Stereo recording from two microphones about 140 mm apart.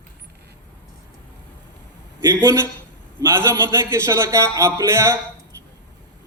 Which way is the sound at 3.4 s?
20° right (ahead or behind).